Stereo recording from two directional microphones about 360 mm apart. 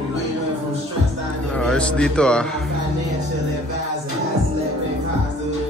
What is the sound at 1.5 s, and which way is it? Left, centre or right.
A man's voice, centre.